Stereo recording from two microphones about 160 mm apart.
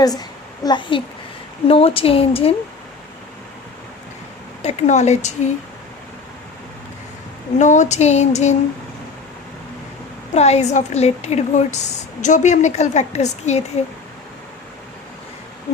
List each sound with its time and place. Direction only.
0.0 s a woman's voice: 25° left (ahead or behind)
4.6 s a woman's voice: 45° left (ahead or behind)
7.6 s a woman's voice: 50° left (ahead or behind)
10.3 s a woman's voice: 45° left (ahead or behind)